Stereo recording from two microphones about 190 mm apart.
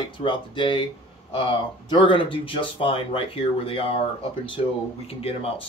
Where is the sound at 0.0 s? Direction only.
25° left (ahead or behind).